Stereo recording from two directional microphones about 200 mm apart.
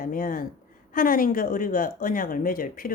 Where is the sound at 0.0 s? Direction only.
45° left (ahead or behind).